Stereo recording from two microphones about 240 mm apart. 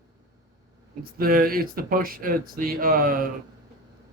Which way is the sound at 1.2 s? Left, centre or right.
Right.